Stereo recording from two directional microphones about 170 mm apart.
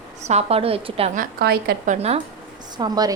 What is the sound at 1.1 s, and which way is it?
Speech, 65° right (ahead or behind).